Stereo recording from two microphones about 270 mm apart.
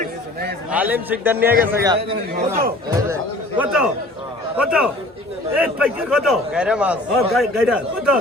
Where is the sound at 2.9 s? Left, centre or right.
Centre.